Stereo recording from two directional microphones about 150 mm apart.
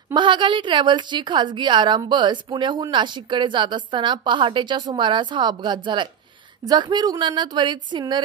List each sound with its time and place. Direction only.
0.1 s a woman's voice: 30° right (ahead or behind)